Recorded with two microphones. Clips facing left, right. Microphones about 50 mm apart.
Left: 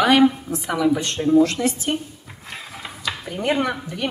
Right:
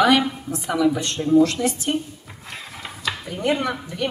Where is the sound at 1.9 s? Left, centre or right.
Centre.